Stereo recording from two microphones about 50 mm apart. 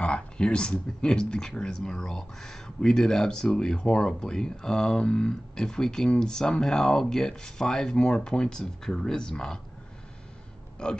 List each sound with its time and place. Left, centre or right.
0.0 s speech: centre
10.8 s speech: left